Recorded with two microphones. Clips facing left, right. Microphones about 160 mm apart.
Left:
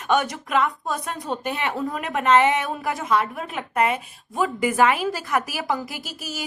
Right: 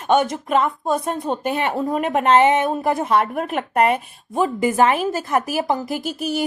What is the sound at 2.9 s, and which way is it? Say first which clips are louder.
A woman's voice: right 4 dB; 55° right (ahead or behind).